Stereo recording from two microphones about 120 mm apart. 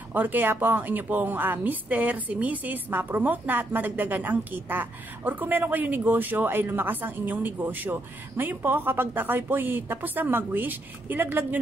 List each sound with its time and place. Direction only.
0.1 s a woman's voice: 15° right (ahead or behind)